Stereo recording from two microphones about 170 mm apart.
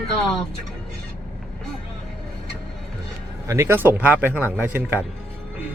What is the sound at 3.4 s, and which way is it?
Speech, 15° right (ahead or behind).